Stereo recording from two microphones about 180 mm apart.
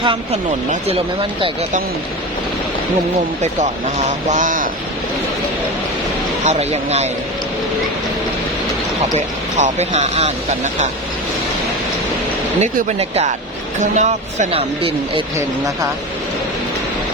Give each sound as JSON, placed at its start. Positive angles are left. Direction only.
{"t": 0.0, "sound": "a woman's voice", "side_deg": -30}
{"t": 3.4, "sound": "speech", "side_deg": -40}
{"t": 6.4, "sound": "speech", "side_deg": -40}
{"t": 9.1, "sound": "speech", "side_deg": -40}
{"t": 12.5, "sound": "speech", "side_deg": -35}